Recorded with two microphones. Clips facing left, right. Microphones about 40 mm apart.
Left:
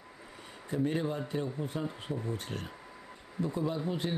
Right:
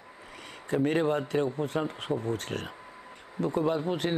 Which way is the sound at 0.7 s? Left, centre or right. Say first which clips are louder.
Right 6 dB; right.